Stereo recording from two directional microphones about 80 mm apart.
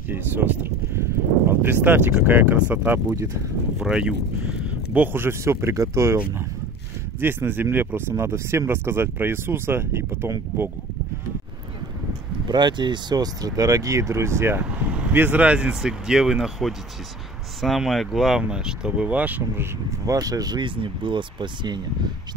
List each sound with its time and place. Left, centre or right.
1.5 s speech: right
3.8 s speech: centre
4.9 s speech: right
7.2 s speech: right
12.4 s speech: right
15.1 s speech: right
20.1 s speech: right